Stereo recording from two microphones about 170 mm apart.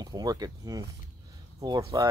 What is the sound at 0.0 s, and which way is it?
Speech, 25° right (ahead or behind).